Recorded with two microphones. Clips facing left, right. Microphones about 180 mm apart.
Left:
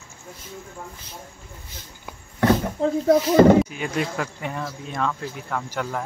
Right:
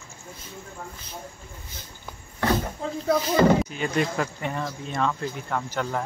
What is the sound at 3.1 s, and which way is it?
Speech, 45° left (ahead or behind).